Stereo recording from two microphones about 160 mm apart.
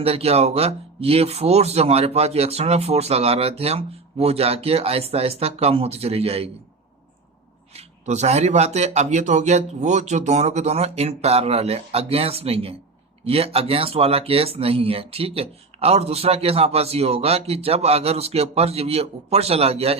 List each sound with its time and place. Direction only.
0.0 s speech: 40° right (ahead or behind)
7.7 s speech: 45° right (ahead or behind)